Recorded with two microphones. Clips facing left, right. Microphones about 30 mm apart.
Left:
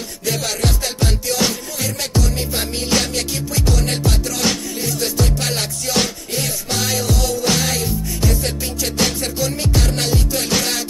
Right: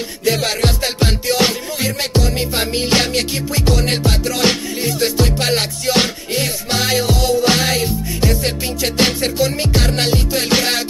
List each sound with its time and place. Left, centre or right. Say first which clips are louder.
0.2 s music: right 4 dB; right